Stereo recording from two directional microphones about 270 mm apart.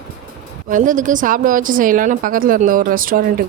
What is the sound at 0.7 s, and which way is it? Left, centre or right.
A woman's voice, right.